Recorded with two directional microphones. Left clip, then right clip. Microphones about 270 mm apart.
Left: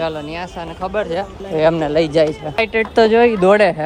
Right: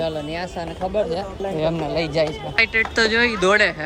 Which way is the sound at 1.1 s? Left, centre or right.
Left.